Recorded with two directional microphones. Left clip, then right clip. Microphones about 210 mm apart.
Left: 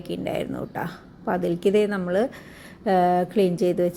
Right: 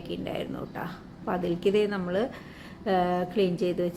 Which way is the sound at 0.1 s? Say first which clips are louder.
Left 6 dB; 30° left (ahead or behind).